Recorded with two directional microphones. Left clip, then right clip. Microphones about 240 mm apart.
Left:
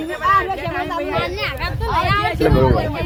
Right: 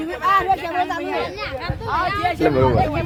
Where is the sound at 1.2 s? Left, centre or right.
Left.